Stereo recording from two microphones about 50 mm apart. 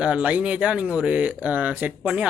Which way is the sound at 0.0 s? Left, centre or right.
Right.